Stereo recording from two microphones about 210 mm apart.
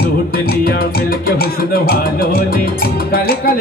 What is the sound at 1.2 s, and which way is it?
Music, 45° left (ahead or behind).